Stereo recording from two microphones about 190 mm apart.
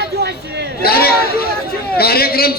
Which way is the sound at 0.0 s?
60° right (ahead or behind).